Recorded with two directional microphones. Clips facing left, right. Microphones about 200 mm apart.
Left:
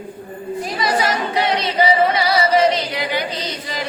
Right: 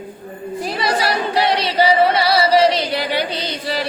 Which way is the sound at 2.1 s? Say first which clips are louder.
Right 2 dB; 30° right (ahead or behind).